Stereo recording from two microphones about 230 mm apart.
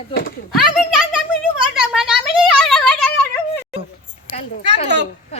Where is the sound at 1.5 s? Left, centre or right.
Centre.